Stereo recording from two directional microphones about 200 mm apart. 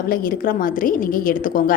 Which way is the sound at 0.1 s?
45° left (ahead or behind).